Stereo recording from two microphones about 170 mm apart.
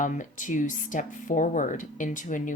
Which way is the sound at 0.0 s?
50° left (ahead or behind).